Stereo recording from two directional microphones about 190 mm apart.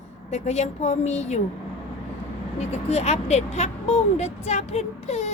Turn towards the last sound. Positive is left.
turn(degrees=35)  # may be behind; listen again after turning